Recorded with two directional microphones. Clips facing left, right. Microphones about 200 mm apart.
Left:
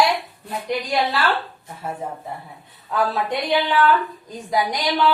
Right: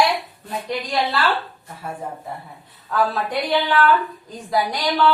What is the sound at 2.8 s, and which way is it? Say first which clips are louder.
Speech: even; 20° left (ahead or behind).